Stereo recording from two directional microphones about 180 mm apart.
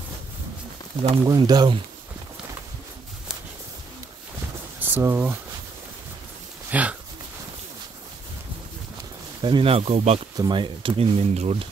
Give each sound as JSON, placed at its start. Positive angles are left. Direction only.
{"t": 1.2, "sound": "speech", "side_deg": -20}
{"t": 4.7, "sound": "speech", "side_deg": -10}
{"t": 6.7, "sound": "speech", "side_deg": -5}
{"t": 9.4, "sound": "speech", "side_deg": -30}
{"t": 10.3, "sound": "speech", "side_deg": -25}